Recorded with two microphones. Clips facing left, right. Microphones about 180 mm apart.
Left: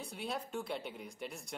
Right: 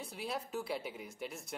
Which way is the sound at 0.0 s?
Centre (ahead or behind).